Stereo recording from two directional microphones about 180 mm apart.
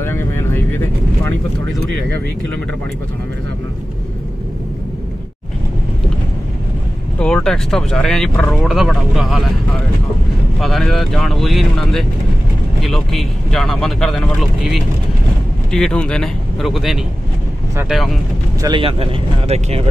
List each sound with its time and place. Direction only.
0.0 s vehicle: 15° left (ahead or behind)
7.2 s speech: 5° left (ahead or behind)
10.6 s speech: centre (ahead or behind)
18.6 s speech: 25° right (ahead or behind)